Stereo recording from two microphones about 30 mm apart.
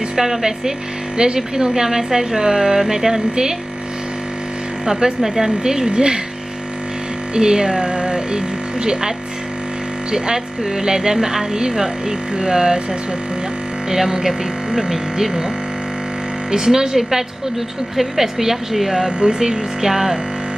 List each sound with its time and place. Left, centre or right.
0.1 s speech: centre
4.8 s speech: centre
7.3 s speech: right
10.1 s speech: centre
13.8 s speech: centre
16.4 s speech: centre
18.9 s speech: right
19.9 s speech: centre